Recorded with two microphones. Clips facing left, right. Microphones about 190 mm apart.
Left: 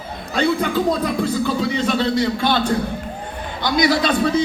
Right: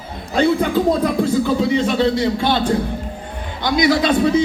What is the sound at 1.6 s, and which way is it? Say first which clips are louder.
A man's voice: right 3 dB; 25° right (ahead or behind).